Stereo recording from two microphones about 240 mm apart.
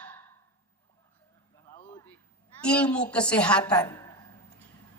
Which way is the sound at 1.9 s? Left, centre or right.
Centre.